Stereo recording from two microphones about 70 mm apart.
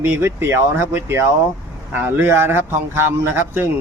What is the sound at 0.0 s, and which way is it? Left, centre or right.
Speech, right.